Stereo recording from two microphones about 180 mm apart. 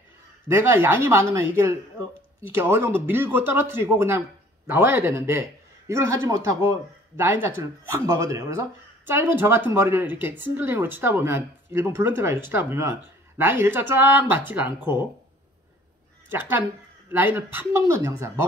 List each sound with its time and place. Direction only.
0.5 s speech: 15° right (ahead or behind)
2.5 s speech: 15° right (ahead or behind)
16.3 s a woman's voice: 10° right (ahead or behind)